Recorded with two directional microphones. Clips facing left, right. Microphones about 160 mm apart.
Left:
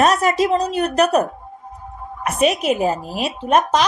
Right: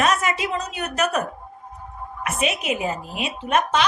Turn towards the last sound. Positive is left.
turn(degrees=40)  # may be behind; listen again after turning